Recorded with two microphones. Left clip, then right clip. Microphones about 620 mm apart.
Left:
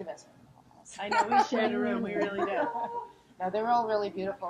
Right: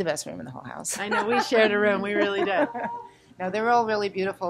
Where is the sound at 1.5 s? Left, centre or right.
Right.